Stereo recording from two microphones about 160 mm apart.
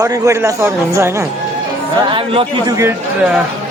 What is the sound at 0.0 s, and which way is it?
Speech, 20° right (ahead or behind).